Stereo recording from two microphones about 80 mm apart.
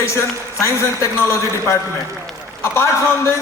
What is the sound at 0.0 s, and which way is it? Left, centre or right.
A man's voice, left.